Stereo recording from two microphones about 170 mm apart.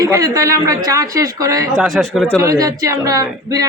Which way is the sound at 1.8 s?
Centre (ahead or behind).